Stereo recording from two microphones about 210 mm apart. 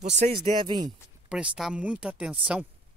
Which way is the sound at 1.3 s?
5° right (ahead or behind).